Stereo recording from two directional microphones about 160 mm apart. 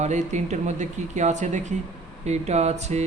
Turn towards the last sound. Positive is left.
turn(degrees=-45)  # may be behind; listen again after turning